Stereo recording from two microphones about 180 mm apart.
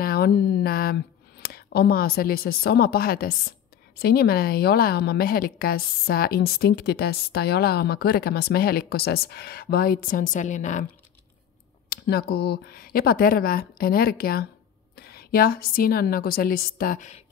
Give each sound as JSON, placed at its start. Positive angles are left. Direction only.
{"t": 0.0, "sound": "speech", "side_deg": 60}
{"t": 11.9, "sound": "a woman's voice", "side_deg": 60}